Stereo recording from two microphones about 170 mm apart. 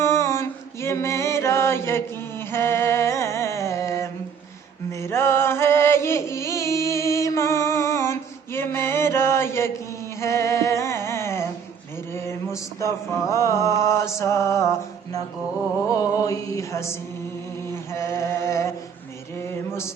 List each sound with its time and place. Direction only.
0.0 s mantra: 15° left (ahead or behind)
4.9 s music: 15° left (ahead or behind)
10.2 s a sound: 20° left (ahead or behind)
12.1 s mantra: 15° left (ahead or behind)